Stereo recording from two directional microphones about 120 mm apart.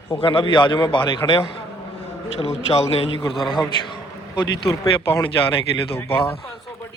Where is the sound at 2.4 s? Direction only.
55° left (ahead or behind).